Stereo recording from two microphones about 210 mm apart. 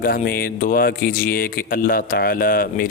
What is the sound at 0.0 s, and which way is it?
A man's voice, 45° left (ahead or behind).